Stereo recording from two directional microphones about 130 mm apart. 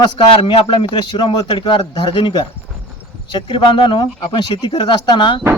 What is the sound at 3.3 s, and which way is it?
Speech, 40° left (ahead or behind).